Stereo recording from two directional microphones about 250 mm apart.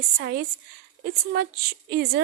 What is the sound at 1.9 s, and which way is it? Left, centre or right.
Speech, right.